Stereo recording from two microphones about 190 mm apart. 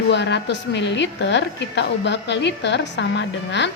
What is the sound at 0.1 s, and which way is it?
A woman's voice, 65° left (ahead or behind).